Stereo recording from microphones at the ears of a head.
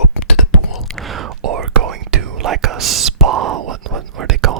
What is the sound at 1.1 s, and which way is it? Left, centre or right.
Whispering, right.